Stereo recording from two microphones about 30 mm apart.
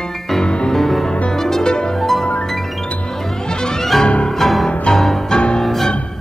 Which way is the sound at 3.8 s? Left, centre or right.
Centre.